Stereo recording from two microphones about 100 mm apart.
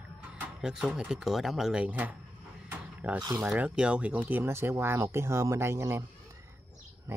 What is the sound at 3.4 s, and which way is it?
Speech, 15° right (ahead or behind).